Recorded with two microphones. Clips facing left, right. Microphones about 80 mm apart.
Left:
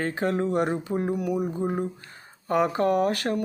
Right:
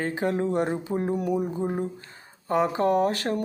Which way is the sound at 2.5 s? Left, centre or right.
Right.